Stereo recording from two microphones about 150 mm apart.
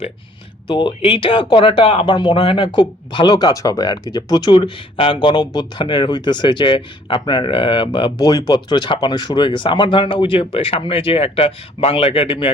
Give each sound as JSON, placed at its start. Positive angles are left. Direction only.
{"t": 0.7, "sound": "speech", "side_deg": 30}